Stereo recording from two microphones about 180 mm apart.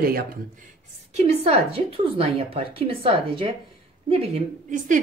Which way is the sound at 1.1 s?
35° right (ahead or behind).